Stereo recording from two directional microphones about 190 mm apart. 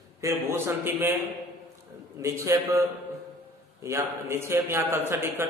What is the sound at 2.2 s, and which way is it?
A man's voice, 15° right (ahead or behind).